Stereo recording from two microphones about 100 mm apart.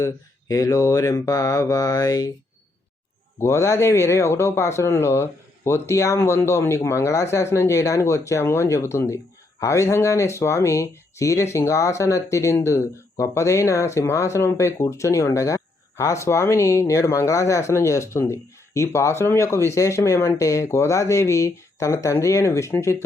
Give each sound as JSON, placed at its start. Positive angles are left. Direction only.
{"t": 0.0, "sound": "mantra", "side_deg": 35}
{"t": 3.4, "sound": "speech", "side_deg": 30}
{"t": 20.4, "sound": "mantra", "side_deg": 35}
{"t": 22.0, "sound": "speech", "side_deg": 30}